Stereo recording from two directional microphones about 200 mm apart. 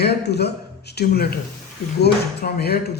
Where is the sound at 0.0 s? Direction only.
55° left (ahead or behind).